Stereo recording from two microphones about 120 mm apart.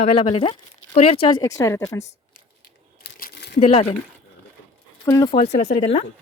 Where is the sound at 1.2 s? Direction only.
35° left (ahead or behind).